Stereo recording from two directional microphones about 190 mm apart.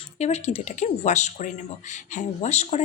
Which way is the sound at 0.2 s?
35° left (ahead or behind).